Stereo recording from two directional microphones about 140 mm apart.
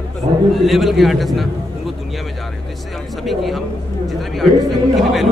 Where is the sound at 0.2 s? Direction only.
50° right (ahead or behind).